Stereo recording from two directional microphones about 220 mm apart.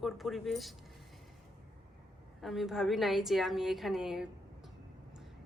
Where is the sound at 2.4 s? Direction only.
Centre (ahead or behind).